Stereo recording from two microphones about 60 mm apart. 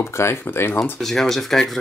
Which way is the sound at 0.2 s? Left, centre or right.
Left.